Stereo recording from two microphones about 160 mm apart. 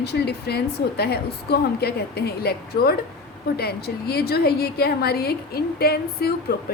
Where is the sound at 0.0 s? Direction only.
90° left.